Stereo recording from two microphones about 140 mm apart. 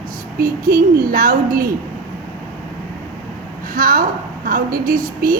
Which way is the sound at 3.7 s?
75° right (ahead or behind).